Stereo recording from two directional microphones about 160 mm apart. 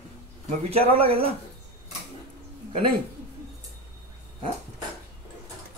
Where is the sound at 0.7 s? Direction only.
40° right (ahead or behind).